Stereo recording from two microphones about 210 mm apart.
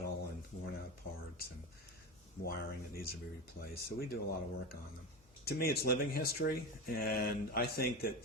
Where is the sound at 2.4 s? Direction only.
45° left (ahead or behind).